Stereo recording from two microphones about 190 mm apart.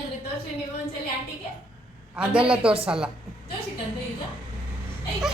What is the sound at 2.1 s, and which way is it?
Speech, 5° right (ahead or behind).